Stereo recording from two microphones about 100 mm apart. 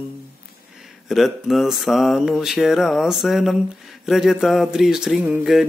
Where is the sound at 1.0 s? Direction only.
Centre (ahead or behind).